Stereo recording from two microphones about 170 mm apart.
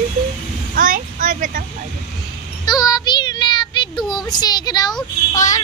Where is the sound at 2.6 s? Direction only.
25° left (ahead or behind).